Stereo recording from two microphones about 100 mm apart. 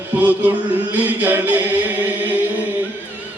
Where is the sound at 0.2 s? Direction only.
15° right (ahead or behind).